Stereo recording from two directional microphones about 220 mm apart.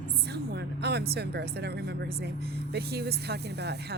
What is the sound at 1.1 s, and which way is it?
Speech, 50° right (ahead or behind).